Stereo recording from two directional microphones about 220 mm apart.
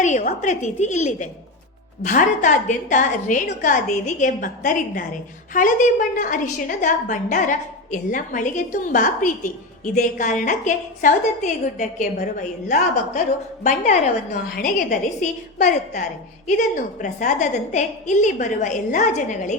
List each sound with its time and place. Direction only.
0.0 s a woman's voice: 35° left (ahead or behind)